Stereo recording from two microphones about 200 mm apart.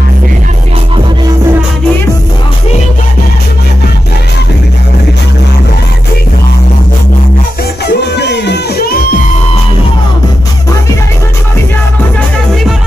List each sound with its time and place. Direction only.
7.8 s music: 60° left (ahead or behind)